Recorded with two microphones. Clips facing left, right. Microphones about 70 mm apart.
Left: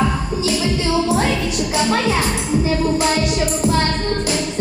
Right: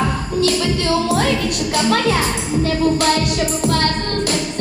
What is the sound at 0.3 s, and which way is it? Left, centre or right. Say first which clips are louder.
Music: right 4 dB; right.